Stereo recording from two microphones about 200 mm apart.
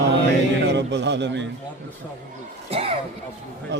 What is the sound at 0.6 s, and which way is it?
Speech, 60° right (ahead or behind).